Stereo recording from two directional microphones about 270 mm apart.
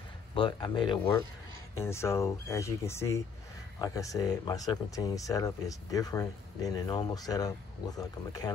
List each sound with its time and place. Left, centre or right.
0.3 s speech: centre